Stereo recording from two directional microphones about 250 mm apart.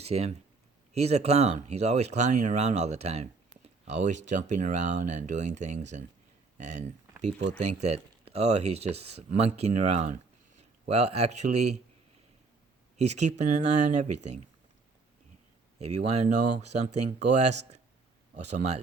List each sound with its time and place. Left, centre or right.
0.0 s speech: right
13.0 s speech: right
15.8 s speech: right
18.5 s speech: right